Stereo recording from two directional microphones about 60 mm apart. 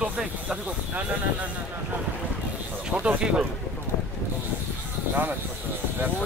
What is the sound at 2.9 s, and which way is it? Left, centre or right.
Speech, right.